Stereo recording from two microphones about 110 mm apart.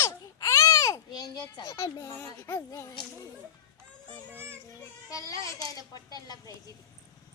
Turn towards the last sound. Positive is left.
turn(degrees=35)  # may be behind; listen again after turning